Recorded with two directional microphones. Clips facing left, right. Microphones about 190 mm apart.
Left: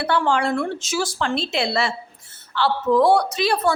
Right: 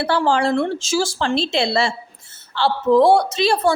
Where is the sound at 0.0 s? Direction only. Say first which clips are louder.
Right 2 dB; 30° right (ahead or behind).